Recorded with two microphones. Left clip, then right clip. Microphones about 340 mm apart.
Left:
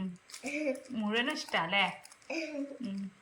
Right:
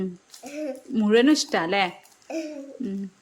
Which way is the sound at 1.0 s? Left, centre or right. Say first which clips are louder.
Right 16 dB; centre.